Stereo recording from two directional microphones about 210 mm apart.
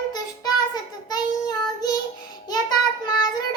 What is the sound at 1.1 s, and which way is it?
Child singing, 20° left (ahead or behind).